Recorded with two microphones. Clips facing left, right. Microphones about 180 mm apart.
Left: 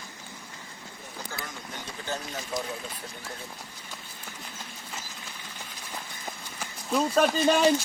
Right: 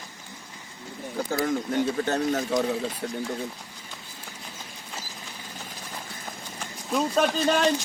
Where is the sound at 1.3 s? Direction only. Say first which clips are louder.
Right 16 dB; 55° right (ahead or behind).